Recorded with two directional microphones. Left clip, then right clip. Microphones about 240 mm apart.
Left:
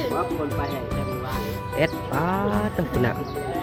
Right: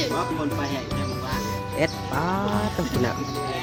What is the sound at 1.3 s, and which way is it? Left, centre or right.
Speech, centre.